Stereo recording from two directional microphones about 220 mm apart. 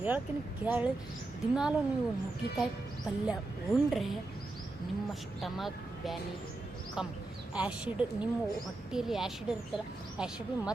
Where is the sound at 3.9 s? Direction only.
Centre (ahead or behind).